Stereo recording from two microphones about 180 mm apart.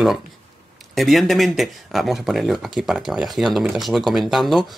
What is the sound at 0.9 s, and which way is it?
Speech, centre (ahead or behind).